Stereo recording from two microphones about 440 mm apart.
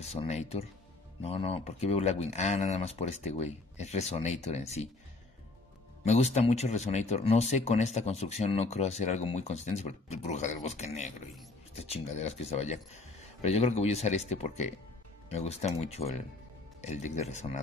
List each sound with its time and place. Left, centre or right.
0.0 s speech: centre
6.0 s speech: centre